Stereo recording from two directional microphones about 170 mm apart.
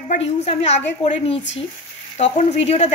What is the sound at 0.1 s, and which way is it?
A woman's voice, 40° left (ahead or behind).